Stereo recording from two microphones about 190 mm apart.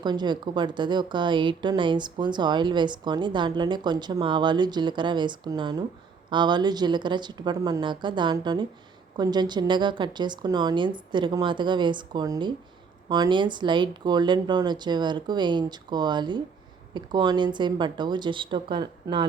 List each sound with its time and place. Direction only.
0.0 s a woman's voice: 25° right (ahead or behind)